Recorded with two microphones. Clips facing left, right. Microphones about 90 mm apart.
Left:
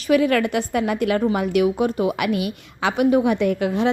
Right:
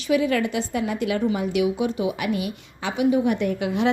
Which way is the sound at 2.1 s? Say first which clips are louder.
Left 3 dB; 75° left (ahead or behind).